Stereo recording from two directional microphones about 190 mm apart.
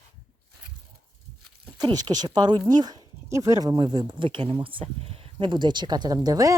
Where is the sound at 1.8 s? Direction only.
20° right (ahead or behind).